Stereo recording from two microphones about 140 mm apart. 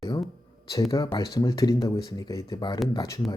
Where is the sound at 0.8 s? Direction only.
25° left (ahead or behind).